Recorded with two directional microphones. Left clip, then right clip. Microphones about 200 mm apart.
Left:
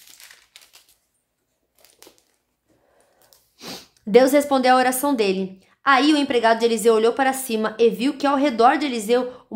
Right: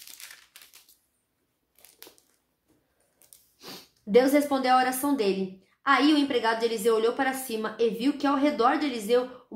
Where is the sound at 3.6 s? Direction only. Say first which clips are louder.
Left 8 dB; 45° left (ahead or behind).